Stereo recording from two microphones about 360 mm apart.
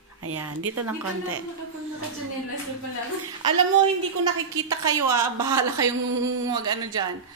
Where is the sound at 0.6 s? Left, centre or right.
Right.